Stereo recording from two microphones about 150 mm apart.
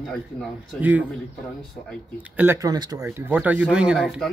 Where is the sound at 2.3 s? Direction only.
15° right (ahead or behind).